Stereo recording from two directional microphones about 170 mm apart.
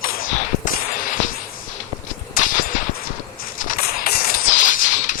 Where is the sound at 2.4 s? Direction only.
50° left (ahead or behind).